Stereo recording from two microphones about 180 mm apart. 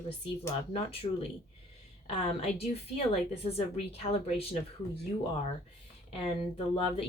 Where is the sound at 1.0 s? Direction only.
30° left (ahead or behind).